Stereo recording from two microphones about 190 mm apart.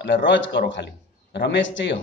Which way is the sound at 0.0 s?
65° left (ahead or behind).